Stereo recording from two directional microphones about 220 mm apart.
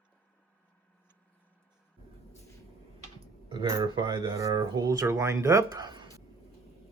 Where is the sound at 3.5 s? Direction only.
20° right (ahead or behind).